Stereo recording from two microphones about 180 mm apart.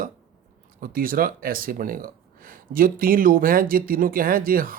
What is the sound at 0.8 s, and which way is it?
Speech, 55° right (ahead or behind).